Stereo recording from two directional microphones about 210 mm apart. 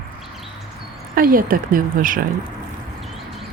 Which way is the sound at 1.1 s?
45° right (ahead or behind).